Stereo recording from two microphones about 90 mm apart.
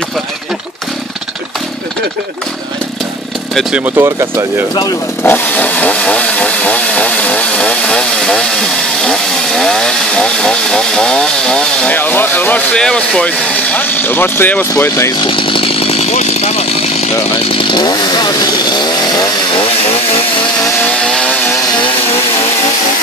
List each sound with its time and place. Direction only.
3.9 s speech: 30° right (ahead or behind)
5.2 s chainsaw: 20° left (ahead or behind)
12.7 s speech: 10° left (ahead or behind)
14.8 s speech: 35° left (ahead or behind)
15.1 s speech: 75° left (ahead or behind); by 16.0 s 90° left
17.5 s chainsaw: 85° left
17.7 s chainsaw: 50° left (ahead or behind)
21.0 s chainsaw: 5° left (ahead or behind)